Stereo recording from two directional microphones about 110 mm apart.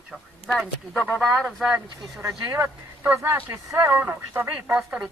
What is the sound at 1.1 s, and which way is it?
Speech, 5° right (ahead or behind).